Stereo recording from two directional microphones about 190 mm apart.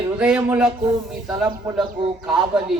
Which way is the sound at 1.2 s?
20° right (ahead or behind).